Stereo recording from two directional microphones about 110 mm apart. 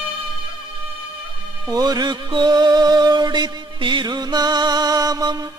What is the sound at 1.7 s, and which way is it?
Music, 35° right (ahead or behind).